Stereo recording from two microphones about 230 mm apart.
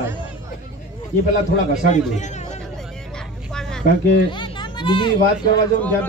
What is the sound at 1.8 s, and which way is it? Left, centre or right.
Speech, left.